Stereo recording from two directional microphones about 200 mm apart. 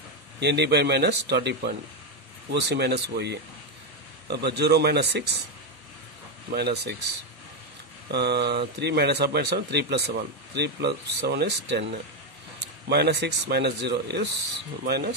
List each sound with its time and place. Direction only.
0.4 s speech: 55° right (ahead or behind)
6.5 s speech: 55° right (ahead or behind)
8.1 s speech: 55° right (ahead or behind)